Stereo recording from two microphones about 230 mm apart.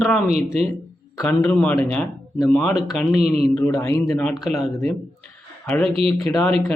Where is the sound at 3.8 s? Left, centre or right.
Centre.